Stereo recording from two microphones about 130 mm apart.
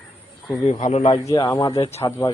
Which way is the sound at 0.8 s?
55° left (ahead or behind).